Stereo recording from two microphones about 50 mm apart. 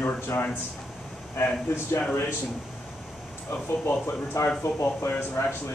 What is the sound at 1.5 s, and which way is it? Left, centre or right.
Speech, left.